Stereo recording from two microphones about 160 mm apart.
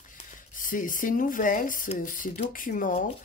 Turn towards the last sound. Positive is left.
turn(degrees=55)  # may be behind; listen again after turning